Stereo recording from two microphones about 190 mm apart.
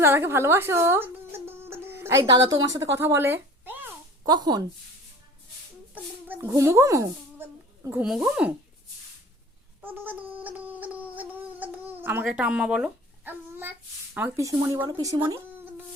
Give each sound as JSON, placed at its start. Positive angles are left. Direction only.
{"t": 0.0, "sound": "a woman's voice", "side_deg": -10}
{"t": 4.3, "sound": "speech", "side_deg": -20}
{"t": 5.9, "sound": "speech", "side_deg": -10}
{"t": 9.8, "sound": "speech", "side_deg": -10}